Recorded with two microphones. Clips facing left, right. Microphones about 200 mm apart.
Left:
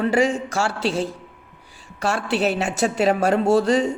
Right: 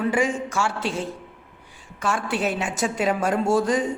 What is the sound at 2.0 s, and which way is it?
A man's voice, 70° left (ahead or behind).